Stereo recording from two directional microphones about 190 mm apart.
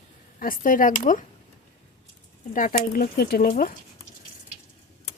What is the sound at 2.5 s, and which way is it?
Speech, 45° left (ahead or behind).